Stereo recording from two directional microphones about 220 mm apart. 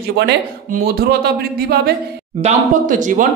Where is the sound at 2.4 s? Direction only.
35° right (ahead or behind).